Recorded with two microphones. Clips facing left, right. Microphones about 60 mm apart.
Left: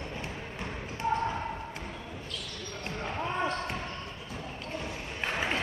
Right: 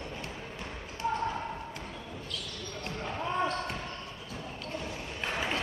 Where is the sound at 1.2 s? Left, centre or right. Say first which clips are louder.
Left 1 dB; centre.